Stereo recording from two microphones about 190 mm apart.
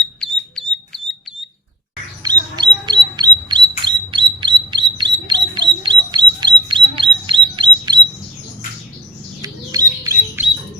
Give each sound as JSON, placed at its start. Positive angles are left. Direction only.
{"t": 2.2, "sound": "bird", "side_deg": -25}
{"t": 9.4, "sound": "squawk", "side_deg": -20}